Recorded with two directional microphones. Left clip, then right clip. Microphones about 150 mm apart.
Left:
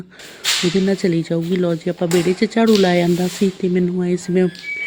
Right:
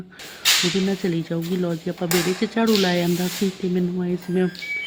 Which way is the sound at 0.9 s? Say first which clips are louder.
Left 6 dB; 35° left (ahead or behind).